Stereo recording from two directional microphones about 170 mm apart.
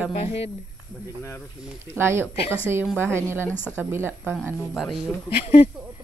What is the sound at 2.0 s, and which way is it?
Speech, 15° right (ahead or behind).